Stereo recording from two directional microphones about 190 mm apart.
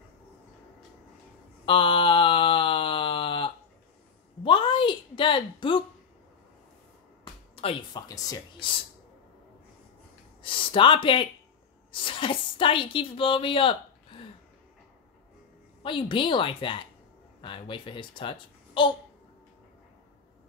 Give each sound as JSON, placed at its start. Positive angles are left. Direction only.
{"t": 1.7, "sound": "a sound", "side_deg": 25}
{"t": 7.5, "sound": "speech", "side_deg": 30}
{"t": 10.4, "sound": "a woman's voice", "side_deg": 25}
{"t": 15.8, "sound": "a child's voice", "side_deg": 25}